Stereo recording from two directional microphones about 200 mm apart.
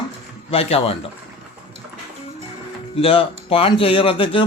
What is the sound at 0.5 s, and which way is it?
Speech, 30° left (ahead or behind).